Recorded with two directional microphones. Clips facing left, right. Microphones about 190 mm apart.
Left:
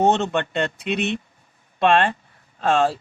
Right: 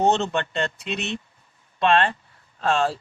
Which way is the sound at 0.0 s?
55° left (ahead or behind).